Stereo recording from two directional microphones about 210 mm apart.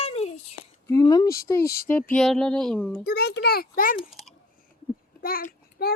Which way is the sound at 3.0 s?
50° left (ahead or behind).